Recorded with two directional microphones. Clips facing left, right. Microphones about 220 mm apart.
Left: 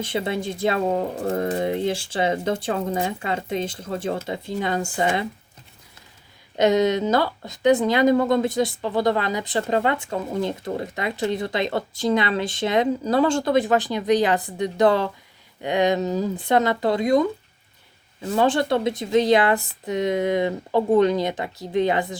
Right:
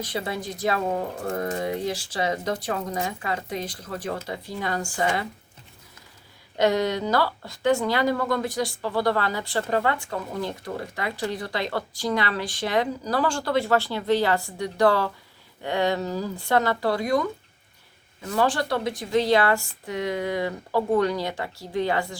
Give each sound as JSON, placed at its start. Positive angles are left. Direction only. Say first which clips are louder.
{"t": 0.0, "sound": "speech", "louder": "left 5 dB", "side_deg": 25}
{"t": 6.6, "sound": "speech", "louder": "left 4 dB", "side_deg": 20}